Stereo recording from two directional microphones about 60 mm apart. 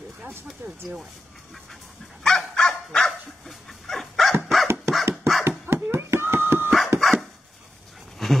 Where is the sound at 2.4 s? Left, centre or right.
Centre.